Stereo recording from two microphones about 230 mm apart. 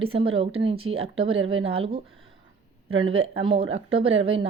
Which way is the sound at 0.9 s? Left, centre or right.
Right.